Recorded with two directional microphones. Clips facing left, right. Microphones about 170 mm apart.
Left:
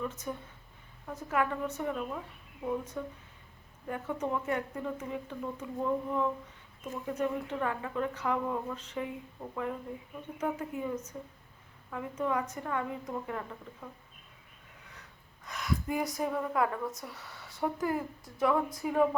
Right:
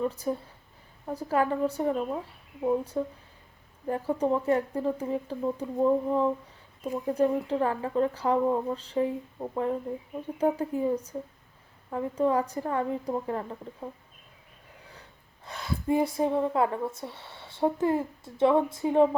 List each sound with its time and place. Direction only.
0.0 s speech: 35° right (ahead or behind)
15.4 s speech: 30° right (ahead or behind)